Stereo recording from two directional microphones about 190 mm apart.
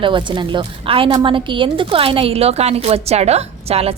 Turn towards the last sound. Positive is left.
turn(degrees=-30)  # may be behind; listen again after turning